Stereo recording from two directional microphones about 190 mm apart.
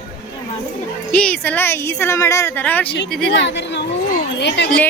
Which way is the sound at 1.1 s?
5° left (ahead or behind).